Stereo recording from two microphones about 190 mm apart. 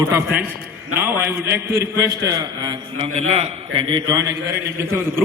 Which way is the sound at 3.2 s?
30° right (ahead or behind).